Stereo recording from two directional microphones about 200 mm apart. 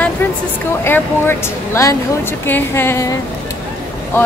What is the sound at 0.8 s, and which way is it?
Speech, 10° left (ahead or behind).